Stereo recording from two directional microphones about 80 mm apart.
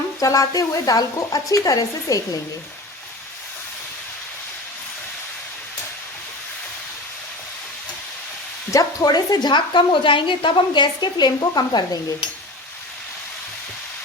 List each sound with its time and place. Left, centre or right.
0.2 s speech: left
8.7 s speech: left